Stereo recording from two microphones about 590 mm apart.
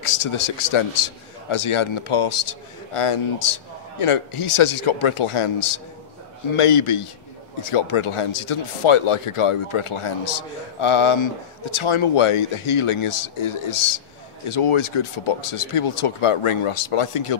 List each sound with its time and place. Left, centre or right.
0.0 s speech: left